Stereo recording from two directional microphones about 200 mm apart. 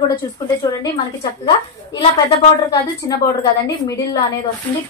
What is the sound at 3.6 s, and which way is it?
Speech, 15° left (ahead or behind).